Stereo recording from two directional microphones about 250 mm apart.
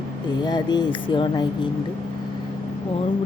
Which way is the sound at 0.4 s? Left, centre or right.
Centre.